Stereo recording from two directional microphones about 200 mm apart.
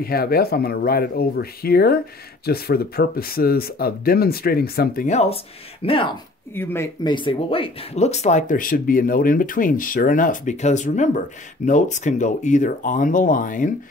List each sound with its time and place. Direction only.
0.0 s speech: 50° left (ahead or behind); by 6.1 s 25° left (ahead or behind)
6.5 s speech: 10° left (ahead or behind); by 13.7 s 40° left (ahead or behind)